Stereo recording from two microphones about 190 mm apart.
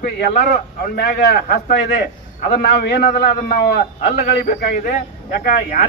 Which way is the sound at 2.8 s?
60° left (ahead or behind).